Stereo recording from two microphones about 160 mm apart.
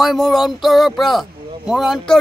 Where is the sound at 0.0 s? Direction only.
Centre (ahead or behind).